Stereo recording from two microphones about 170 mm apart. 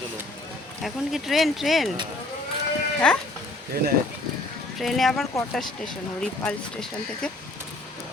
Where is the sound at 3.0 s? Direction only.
5° left (ahead or behind).